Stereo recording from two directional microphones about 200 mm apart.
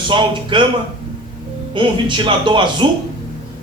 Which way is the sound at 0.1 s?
25° right (ahead or behind).